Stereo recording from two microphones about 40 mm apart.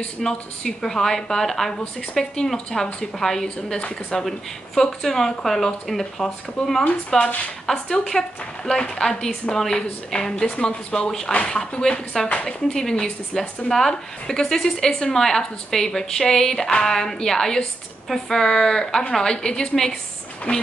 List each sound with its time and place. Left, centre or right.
0.2 s a woman's voice: centre
7.2 s speech: left
7.9 s a woman's voice: centre
9.7 s speech: centre
11.1 s a woman's voice: centre
11.3 s a woman's voice: left
20.5 s speech: left